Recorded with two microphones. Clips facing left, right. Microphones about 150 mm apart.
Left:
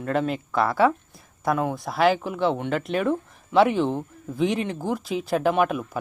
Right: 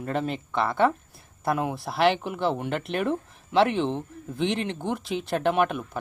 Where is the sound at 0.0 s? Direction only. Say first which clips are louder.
Left 4 dB; centre (ahead or behind).